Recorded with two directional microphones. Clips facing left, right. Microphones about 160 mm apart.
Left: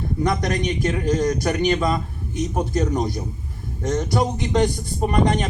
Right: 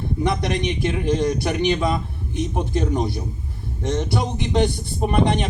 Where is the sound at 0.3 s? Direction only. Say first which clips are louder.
Even; 45° left (ahead or behind).